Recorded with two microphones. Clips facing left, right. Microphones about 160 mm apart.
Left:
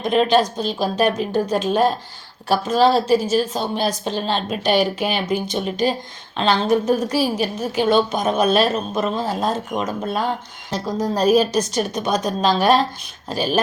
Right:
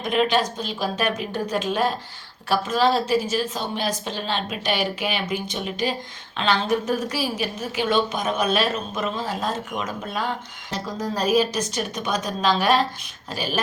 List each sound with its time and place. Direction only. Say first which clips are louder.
0.0 s a woman's voice: left 5 dB; 35° left (ahead or behind)